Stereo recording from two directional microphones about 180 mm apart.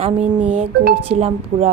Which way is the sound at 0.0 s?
40° right (ahead or behind).